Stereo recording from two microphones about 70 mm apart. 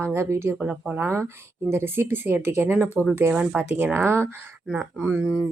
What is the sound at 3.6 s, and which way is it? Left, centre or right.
Speech, right.